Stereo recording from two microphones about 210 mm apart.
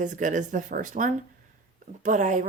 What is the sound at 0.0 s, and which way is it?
Speech, 35° right (ahead or behind).